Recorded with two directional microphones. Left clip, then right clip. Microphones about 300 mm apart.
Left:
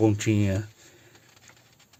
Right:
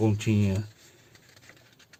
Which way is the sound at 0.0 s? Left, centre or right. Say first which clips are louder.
Left 4 dB; left.